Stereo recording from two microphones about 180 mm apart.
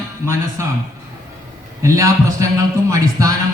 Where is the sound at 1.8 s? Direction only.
15° right (ahead or behind).